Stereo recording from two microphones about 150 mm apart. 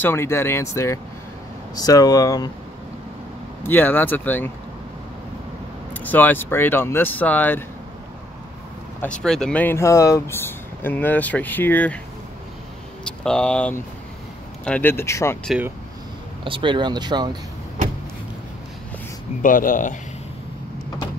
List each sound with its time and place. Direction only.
0.0 s speech: 15° left (ahead or behind)
3.6 s speech: 10° left (ahead or behind)
6.0 s speech: 10° left (ahead or behind)
9.0 s speech: 5° left (ahead or behind)
13.0 s speech: 5° left (ahead or behind)
16.4 s speech: 35° right (ahead or behind)
19.4 s speech: 65° left (ahead or behind)